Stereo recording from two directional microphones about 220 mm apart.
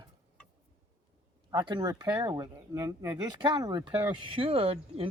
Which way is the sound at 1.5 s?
20° right (ahead or behind).